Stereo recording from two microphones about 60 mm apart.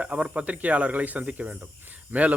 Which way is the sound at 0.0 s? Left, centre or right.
Centre.